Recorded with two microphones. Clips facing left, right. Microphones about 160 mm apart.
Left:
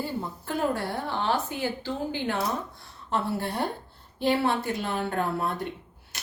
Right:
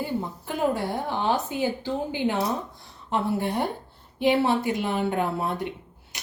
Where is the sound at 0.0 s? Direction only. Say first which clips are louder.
Right 3 dB; 15° right (ahead or behind).